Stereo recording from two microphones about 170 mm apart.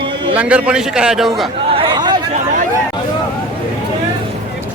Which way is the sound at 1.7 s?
30° right (ahead or behind).